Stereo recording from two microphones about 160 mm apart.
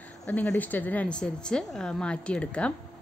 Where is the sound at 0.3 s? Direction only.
10° left (ahead or behind).